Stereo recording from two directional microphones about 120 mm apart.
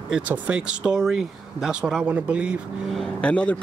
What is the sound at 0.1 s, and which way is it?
Speech, 10° right (ahead or behind).